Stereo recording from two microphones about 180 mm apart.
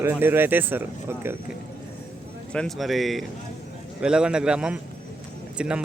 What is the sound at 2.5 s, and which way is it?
Speech, centre (ahead or behind).